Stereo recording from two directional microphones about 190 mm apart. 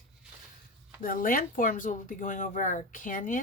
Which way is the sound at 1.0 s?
45° left (ahead or behind).